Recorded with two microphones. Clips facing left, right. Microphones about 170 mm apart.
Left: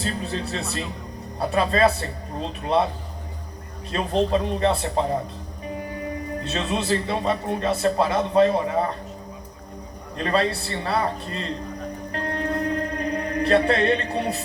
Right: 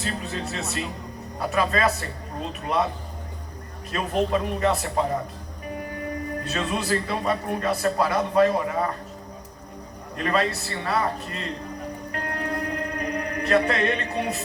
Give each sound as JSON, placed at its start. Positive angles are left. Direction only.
{"t": 0.0, "sound": "a man's voice", "side_deg": 35}
{"t": 3.9, "sound": "a man's voice", "side_deg": 30}
{"t": 6.4, "sound": "a man's voice", "side_deg": 25}
{"t": 10.2, "sound": "a man's voice", "side_deg": 30}
{"t": 12.1, "sound": "music", "side_deg": 30}